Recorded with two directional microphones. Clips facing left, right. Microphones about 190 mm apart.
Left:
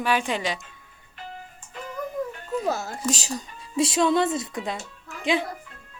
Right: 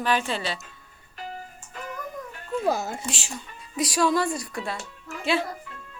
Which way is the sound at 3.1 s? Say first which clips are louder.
Left 6 dB; 40° left (ahead or behind).